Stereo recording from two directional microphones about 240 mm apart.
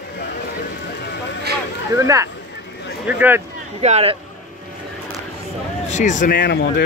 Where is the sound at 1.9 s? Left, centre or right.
Centre.